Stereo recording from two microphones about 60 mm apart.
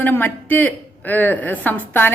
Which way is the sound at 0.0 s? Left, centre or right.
Left.